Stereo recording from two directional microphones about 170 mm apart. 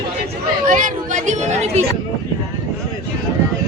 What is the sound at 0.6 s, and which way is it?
Speech, 50° right (ahead or behind).